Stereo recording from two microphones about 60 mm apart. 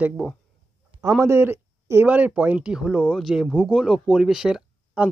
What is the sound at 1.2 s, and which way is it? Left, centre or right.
Speech, right.